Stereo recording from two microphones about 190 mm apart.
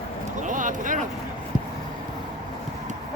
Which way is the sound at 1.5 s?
20° left (ahead or behind).